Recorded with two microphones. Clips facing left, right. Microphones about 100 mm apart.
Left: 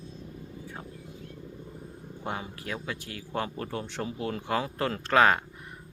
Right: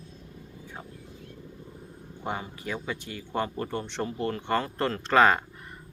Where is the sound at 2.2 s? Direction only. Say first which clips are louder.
Right 2 dB; centre (ahead or behind).